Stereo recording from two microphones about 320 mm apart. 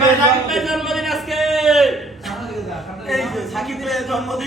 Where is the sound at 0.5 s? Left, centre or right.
Centre.